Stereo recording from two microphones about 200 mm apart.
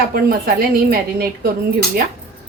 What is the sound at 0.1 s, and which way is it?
A woman's voice, 50° right (ahead or behind).